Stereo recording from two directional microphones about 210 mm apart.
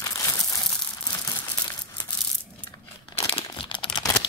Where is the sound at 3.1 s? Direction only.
25° left (ahead or behind).